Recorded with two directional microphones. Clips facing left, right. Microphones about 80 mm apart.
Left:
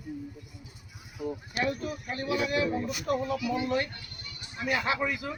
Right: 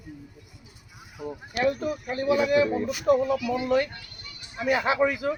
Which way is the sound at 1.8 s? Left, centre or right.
Right.